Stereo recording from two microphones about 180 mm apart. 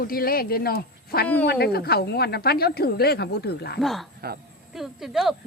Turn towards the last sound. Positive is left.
turn(degrees=0)  # may be behind; listen again after turning